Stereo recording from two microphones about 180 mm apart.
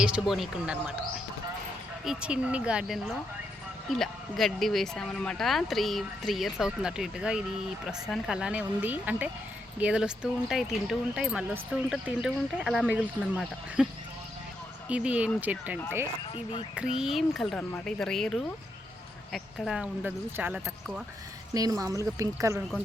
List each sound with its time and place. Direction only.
0.0 s speech: 5° right (ahead or behind)
2.0 s speech: 5° right (ahead or behind)
14.8 s speech: 5° right (ahead or behind)
16.3 s speech: 30° left (ahead or behind)
16.7 s speech: 5° right (ahead or behind)
21.5 s speech: 20° right (ahead or behind)